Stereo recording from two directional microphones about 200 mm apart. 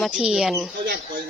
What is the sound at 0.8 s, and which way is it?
Speech, 50° right (ahead or behind).